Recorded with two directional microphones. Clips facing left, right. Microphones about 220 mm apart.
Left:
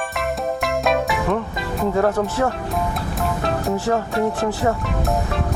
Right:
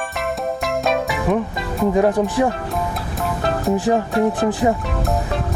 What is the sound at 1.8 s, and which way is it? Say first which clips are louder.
Speech: right 3 dB; 15° right (ahead or behind).